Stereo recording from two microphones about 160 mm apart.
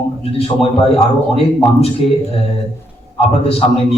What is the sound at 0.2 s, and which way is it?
A man's voice, 40° left (ahead or behind).